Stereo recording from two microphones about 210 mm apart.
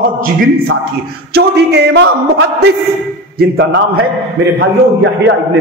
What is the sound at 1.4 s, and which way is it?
A man's voice, 55° right (ahead or behind).